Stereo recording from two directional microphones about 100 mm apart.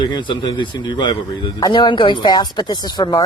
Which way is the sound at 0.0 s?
50° left (ahead or behind).